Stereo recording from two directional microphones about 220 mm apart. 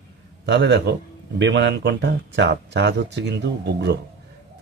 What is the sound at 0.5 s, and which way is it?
Speech, 50° right (ahead or behind).